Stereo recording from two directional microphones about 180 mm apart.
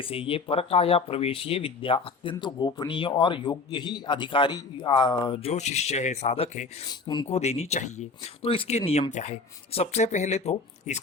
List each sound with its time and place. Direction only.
0.0 s speech: 30° left (ahead or behind)
7.1 s speech: 25° left (ahead or behind)
7.3 s speech: 35° left (ahead or behind)